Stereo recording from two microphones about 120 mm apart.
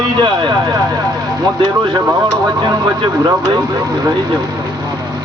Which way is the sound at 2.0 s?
20° right (ahead or behind).